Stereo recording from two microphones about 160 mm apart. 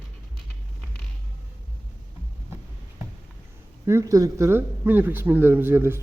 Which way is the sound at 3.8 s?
20° right (ahead or behind).